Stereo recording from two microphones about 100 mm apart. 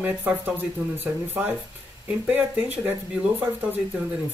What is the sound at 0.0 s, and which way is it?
Speech, 15° right (ahead or behind).